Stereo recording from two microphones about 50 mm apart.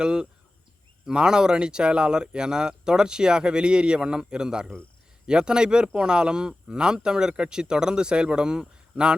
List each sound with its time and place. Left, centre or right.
0.0 s speech: centre